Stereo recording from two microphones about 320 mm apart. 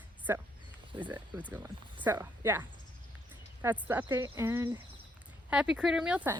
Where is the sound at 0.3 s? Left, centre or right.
Centre.